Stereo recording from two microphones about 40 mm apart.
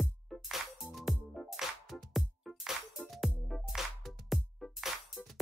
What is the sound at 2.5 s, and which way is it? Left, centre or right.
Music, centre.